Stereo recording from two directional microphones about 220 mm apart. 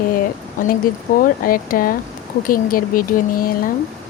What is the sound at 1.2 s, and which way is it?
Speech, 40° left (ahead or behind).